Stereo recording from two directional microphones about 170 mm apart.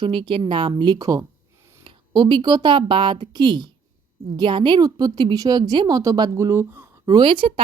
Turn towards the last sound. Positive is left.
turn(degrees=-30)  # may be behind; listen again after turning